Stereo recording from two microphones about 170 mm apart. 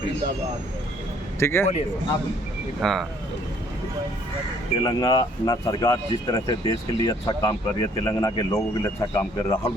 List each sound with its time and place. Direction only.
1.4 s a man's voice: 15° left (ahead or behind)
2.8 s speech: centre (ahead or behind)
4.8 s speech: 25° left (ahead or behind)